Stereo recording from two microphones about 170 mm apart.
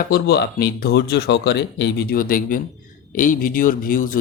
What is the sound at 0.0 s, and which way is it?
Speech, 70° left (ahead or behind).